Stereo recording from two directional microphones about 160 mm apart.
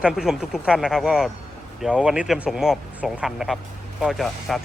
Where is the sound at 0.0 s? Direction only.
5° right (ahead or behind).